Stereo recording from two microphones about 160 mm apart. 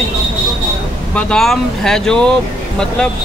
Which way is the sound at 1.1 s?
5° left (ahead or behind).